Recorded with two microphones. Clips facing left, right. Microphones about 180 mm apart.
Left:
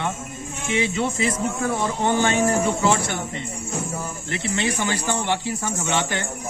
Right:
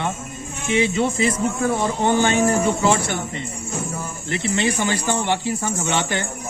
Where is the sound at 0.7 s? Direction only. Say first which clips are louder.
Right 4 dB; 25° right (ahead or behind).